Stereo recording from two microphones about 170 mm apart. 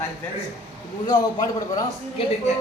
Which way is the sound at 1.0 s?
25° left (ahead or behind).